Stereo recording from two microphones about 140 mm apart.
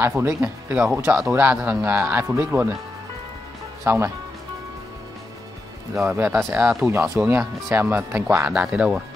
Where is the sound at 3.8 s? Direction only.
20° right (ahead or behind).